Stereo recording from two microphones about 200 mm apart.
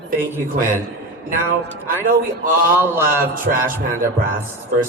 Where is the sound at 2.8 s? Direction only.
10° right (ahead or behind).